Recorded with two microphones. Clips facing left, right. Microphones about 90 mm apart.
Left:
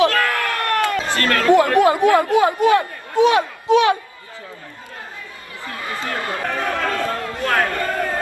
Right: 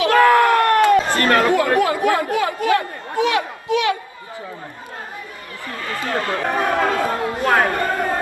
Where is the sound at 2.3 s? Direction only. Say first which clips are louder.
Left 4 dB; 20° left (ahead or behind).